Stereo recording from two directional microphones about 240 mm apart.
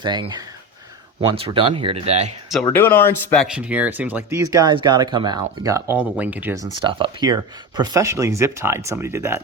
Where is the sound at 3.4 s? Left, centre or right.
Centre.